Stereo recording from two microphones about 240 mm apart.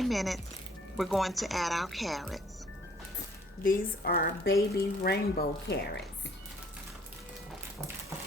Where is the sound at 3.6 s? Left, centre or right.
Left.